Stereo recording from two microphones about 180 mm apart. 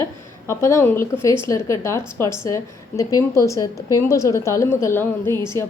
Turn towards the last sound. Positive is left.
turn(degrees=15)  # may be behind; listen again after turning